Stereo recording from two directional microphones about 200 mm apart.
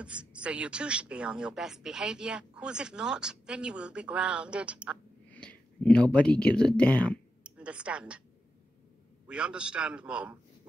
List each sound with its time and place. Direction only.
0.0 s a woman's voice: 5° right (ahead or behind)
5.3 s speech: 5° left (ahead or behind)
7.4 s a woman's voice: 5° right (ahead or behind)
9.3 s a man's voice: 5° right (ahead or behind)